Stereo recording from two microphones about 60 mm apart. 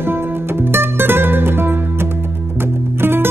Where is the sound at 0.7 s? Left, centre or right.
Right.